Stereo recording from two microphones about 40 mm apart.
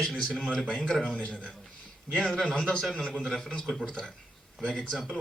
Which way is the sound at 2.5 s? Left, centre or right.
Centre.